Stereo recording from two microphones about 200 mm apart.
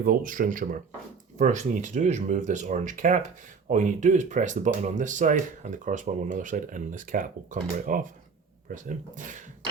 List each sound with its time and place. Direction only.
0.0 s speech: 45° right (ahead or behind)